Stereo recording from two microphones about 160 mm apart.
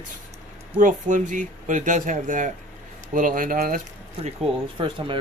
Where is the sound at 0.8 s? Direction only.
55° right (ahead or behind).